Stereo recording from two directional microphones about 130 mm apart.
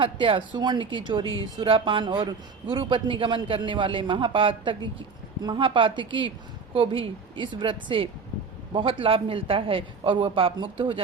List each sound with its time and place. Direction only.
0.0 s a man's voice: 40° right (ahead or behind)